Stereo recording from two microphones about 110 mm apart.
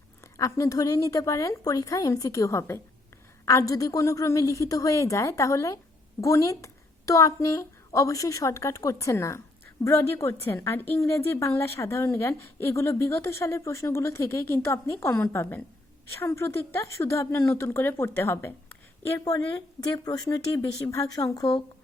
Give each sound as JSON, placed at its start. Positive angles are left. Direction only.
{"t": 0.3, "sound": "a woman's voice", "side_deg": 30}
{"t": 19.2, "sound": "a woman's voice", "side_deg": 35}